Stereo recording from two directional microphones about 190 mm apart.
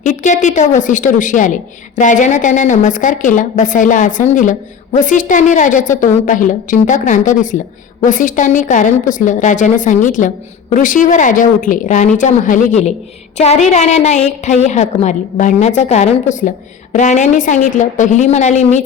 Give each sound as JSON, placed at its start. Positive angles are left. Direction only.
{"t": 0.0, "sound": "a woman's voice", "side_deg": 40}